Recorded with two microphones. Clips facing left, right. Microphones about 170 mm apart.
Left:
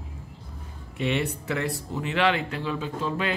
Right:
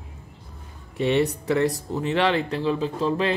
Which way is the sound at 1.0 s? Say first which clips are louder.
Right 5 dB; 35° right (ahead or behind).